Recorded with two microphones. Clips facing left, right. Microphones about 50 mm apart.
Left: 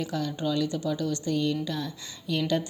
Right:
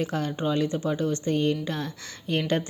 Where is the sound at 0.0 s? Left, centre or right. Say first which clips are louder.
Right 2 dB; right.